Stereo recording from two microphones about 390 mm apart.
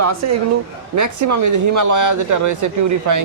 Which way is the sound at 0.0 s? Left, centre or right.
Right.